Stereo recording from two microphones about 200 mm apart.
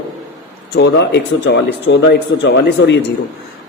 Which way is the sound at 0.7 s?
60° left (ahead or behind).